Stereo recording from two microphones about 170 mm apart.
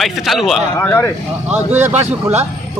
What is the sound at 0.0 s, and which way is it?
Speech, centre (ahead or behind).